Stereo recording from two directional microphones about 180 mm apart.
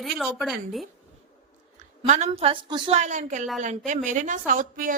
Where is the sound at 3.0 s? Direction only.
45° right (ahead or behind).